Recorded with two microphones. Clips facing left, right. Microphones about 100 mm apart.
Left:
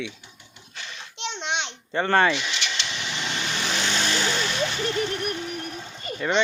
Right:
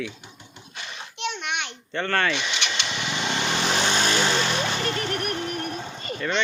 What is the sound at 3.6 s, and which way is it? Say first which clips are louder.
Vehicle: right 2 dB; 55° right (ahead or behind).